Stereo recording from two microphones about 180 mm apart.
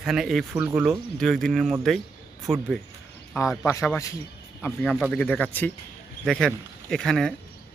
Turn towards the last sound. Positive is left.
turn(degrees=5)  # may be behind; listen again after turning